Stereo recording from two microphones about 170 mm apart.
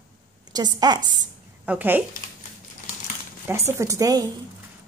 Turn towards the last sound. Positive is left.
turn(degrees=-20)  # may be behind; listen again after turning